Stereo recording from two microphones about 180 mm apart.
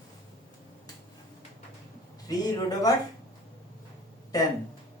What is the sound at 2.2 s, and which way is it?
Speech, 20° left (ahead or behind).